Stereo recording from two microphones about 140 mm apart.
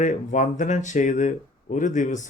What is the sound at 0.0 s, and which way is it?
Speech, 60° left (ahead or behind).